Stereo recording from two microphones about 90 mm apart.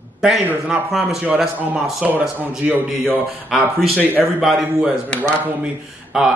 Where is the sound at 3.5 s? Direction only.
Centre (ahead or behind).